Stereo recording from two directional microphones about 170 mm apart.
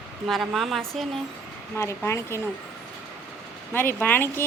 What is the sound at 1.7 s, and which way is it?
Speech, 15° left (ahead or behind).